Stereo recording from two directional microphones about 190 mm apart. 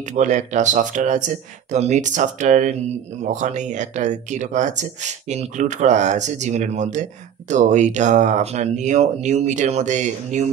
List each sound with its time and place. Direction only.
0.1 s speech: 40° right (ahead or behind)